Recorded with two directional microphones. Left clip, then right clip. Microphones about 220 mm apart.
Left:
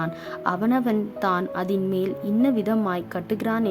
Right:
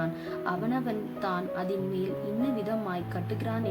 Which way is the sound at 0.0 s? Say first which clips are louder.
Left 5 dB; 55° left (ahead or behind).